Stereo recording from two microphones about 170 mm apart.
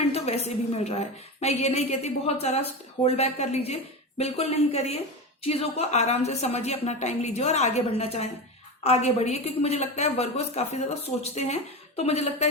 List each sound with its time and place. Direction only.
0.0 s a woman's voice: 40° left (ahead or behind)